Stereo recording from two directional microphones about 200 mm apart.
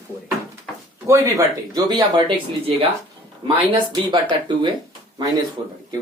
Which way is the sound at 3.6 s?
25° right (ahead or behind).